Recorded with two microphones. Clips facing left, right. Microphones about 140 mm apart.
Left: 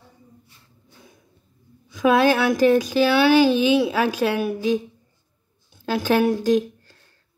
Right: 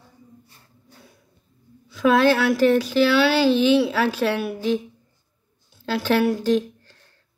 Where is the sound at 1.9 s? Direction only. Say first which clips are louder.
Even; 15° left (ahead or behind).